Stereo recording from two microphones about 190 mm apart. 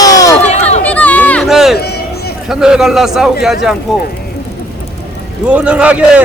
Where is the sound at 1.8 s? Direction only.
55° left (ahead or behind).